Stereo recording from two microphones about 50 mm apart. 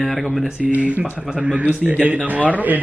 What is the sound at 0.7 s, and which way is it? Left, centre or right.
Speech, right.